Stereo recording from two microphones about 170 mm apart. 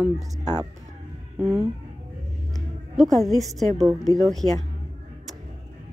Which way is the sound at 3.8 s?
20° right (ahead or behind).